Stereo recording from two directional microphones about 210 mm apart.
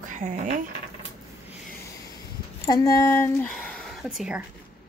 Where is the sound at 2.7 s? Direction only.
15° left (ahead or behind); by 4.4 s 5° right (ahead or behind).